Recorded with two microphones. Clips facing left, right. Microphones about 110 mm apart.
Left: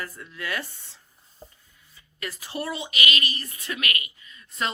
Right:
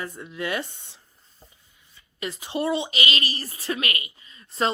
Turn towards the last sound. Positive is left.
turn(degrees=-30)  # may be behind; listen again after turning